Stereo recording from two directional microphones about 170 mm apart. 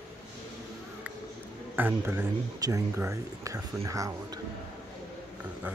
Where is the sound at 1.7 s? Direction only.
10° right (ahead or behind).